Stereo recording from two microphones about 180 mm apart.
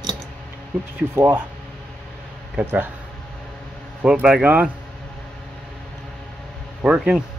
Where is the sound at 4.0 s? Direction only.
5° right (ahead or behind).